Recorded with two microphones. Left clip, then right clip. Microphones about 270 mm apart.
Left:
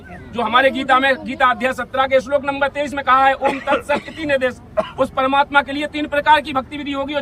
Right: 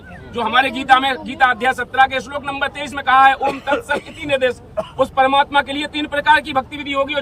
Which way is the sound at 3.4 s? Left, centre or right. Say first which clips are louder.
Left 1 dB; right.